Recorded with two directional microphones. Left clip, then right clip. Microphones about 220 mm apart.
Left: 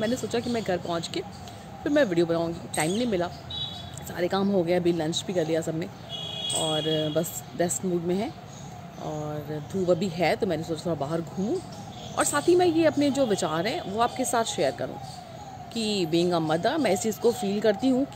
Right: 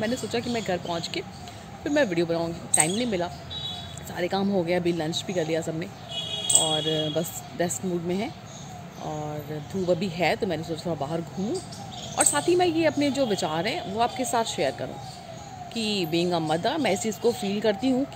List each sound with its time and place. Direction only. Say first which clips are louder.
0.0 s speech: even; 10° left (ahead or behind)
9.8 s speech: even; 10° left (ahead or behind)